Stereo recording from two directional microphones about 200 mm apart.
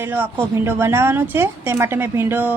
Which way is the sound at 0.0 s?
10° right (ahead or behind).